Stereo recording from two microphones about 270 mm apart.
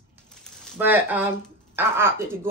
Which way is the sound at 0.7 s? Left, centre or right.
Centre.